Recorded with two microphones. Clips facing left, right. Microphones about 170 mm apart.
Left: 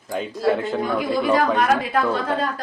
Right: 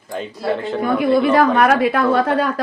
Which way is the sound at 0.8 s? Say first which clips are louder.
Right 9 dB; 60° right (ahead or behind).